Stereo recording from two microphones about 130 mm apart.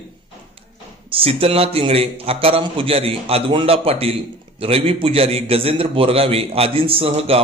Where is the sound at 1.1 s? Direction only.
45° right (ahead or behind).